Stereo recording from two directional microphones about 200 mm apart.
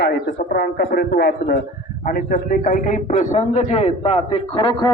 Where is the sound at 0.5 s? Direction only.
60° left (ahead or behind); by 4.9 s 25° left (ahead or behind).